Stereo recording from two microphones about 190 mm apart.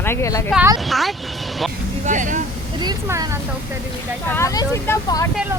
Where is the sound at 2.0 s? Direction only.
40° right (ahead or behind).